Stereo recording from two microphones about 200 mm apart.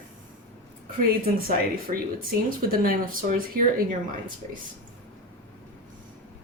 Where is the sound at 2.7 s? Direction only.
45° right (ahead or behind).